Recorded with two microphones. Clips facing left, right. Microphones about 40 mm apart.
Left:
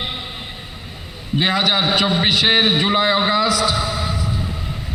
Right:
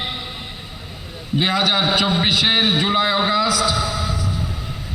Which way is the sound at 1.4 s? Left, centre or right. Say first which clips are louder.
Left 1 dB; left.